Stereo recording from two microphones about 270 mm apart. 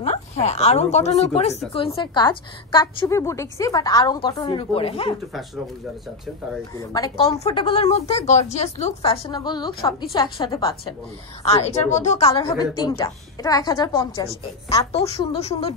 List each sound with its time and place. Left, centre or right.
0.0 s a woman's voice: left
6.8 s a woman's voice: centre